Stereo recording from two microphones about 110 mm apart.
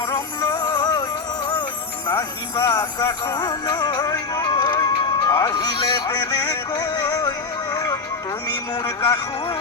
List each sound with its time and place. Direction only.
0.5 s music: 45° left (ahead or behind)
2.6 s music: 45° left (ahead or behind)
7.2 s music: 40° left (ahead or behind)
8.7 s speech: 45° left (ahead or behind)